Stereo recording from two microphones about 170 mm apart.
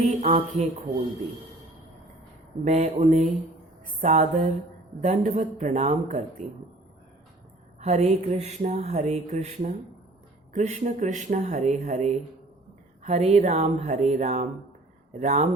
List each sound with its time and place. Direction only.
0.0 s speech: 40° right (ahead or behind)
2.6 s speech: 45° right (ahead or behind)
7.8 s speech: 40° right (ahead or behind)